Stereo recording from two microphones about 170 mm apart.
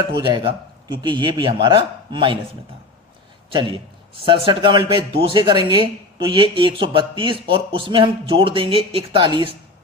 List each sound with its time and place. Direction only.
0.2 s a man's voice: 30° right (ahead or behind)
3.5 s a man's voice: 30° right (ahead or behind)